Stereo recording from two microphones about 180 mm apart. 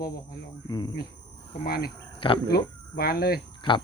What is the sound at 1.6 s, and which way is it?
Speech, 55° left (ahead or behind).